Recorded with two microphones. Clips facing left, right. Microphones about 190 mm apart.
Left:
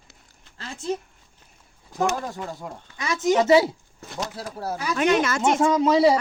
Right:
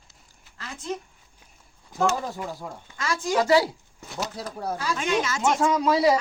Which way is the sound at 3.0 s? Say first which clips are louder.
Left 4 dB; 20° left (ahead or behind).